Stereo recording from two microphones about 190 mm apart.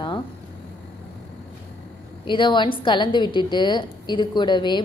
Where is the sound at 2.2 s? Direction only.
25° left (ahead or behind).